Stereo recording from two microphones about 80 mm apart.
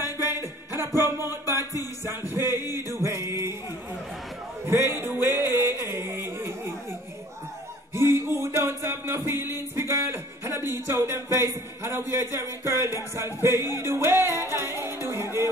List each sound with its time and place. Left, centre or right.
0.3 s music: right
4.6 s music: right
7.9 s music: right
9.8 s a sound: right
13.7 s music: right